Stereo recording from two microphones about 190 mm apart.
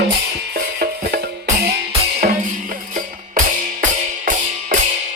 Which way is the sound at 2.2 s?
50° right (ahead or behind).